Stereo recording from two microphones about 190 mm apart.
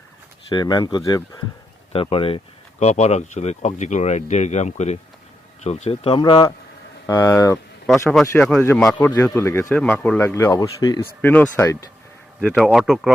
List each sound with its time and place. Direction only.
0.5 s speech: 20° left (ahead or behind)
11.2 s speech: 10° left (ahead or behind)
12.4 s speech: centre (ahead or behind)